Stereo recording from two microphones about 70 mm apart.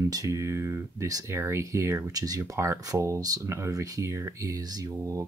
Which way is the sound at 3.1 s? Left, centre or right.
Right.